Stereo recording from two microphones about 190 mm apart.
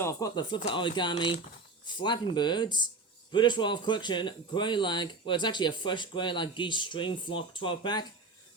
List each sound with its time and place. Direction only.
0.0 s speech: 15° left (ahead or behind)